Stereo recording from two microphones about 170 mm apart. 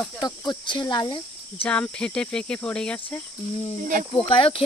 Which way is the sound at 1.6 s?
5° left (ahead or behind).